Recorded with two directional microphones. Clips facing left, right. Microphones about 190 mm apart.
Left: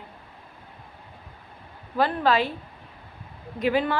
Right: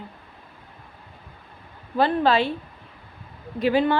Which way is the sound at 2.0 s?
30° right (ahead or behind).